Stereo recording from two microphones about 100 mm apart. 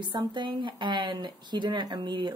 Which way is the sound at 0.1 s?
50° right (ahead or behind).